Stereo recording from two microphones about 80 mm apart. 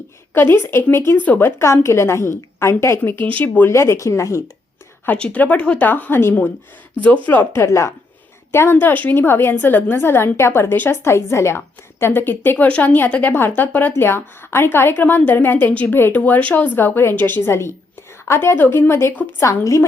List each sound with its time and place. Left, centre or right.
0.3 s a woman's voice: left
3.4 s a woman's voice: left
3.7 s a woman's voice: left
5.0 s a woman's voice: centre; by 7.9 s left
8.5 s a woman's voice: left
19.4 s a woman's voice: left